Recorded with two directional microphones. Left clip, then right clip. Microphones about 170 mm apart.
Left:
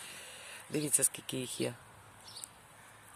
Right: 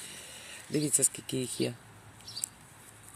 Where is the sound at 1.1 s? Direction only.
10° left (ahead or behind).